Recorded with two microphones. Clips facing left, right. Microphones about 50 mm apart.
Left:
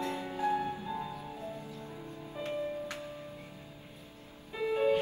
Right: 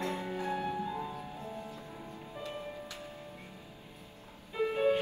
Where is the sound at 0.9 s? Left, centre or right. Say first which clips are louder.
Even; right.